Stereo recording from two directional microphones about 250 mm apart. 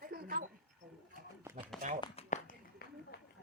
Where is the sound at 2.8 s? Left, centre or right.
Left.